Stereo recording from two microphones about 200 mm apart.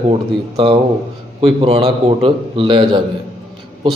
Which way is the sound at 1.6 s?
30° right (ahead or behind).